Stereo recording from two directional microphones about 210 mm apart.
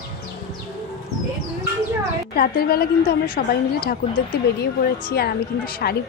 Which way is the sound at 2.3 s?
45° left (ahead or behind).